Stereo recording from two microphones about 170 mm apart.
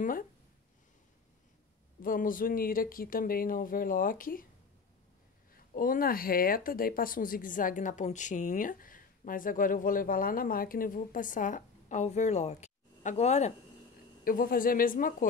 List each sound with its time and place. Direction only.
2.0 s speech: 55° left (ahead or behind)
5.8 s speech: 55° left (ahead or behind); by 13.5 s 40° left (ahead or behind)
14.2 s speech: 55° left (ahead or behind)